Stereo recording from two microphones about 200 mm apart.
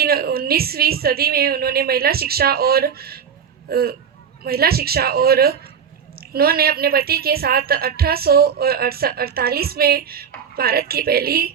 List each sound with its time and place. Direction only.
0.0 s a woman's voice: 50° right (ahead or behind)